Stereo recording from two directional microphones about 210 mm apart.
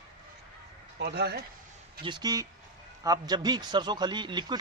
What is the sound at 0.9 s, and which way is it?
Speech, 55° right (ahead or behind).